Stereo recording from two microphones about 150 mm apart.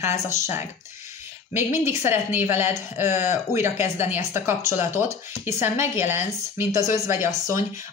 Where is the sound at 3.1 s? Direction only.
50° left (ahead or behind).